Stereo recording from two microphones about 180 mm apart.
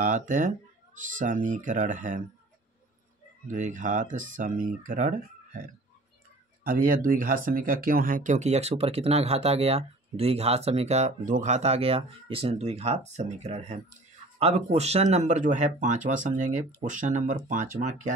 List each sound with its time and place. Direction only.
0.0 s speech: 45° right (ahead or behind)
3.4 s speech: 45° right (ahead or behind)
6.6 s speech: 50° right (ahead or behind)